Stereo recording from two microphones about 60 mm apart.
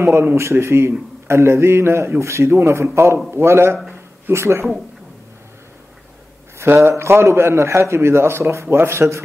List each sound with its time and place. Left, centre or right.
0.0 s a man's voice: right
0.4 s a man's voice: right
6.6 s a man's voice: right